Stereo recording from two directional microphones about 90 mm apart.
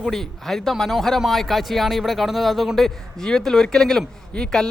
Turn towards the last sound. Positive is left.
turn(degrees=5)  # may be behind; listen again after turning